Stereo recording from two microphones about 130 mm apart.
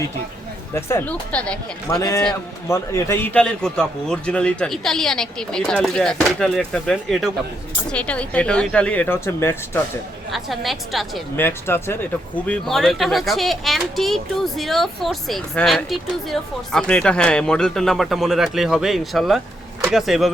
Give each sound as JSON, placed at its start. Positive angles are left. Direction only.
{"t": 0.7, "sound": "speech", "side_deg": 20}
{"t": 1.3, "sound": "speech", "side_deg": 10}
{"t": 2.0, "sound": "speech", "side_deg": 30}
{"t": 10.3, "sound": "speech", "side_deg": 0}
{"t": 11.3, "sound": "speech", "side_deg": 15}